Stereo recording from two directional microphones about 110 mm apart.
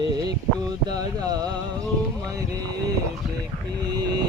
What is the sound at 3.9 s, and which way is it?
Speech, 40° right (ahead or behind).